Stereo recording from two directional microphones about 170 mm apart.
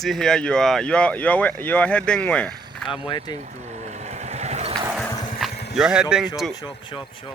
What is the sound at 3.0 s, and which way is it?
Speech, 25° left (ahead or behind).